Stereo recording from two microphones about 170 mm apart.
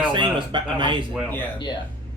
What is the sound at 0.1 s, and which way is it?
Speech, 30° right (ahead or behind).